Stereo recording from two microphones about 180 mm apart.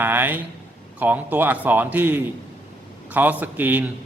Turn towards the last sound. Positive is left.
turn(degrees=-10)  # may be behind; listen again after turning